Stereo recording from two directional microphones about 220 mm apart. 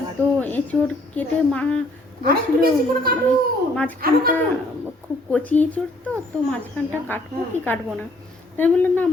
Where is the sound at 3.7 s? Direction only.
5° left (ahead or behind).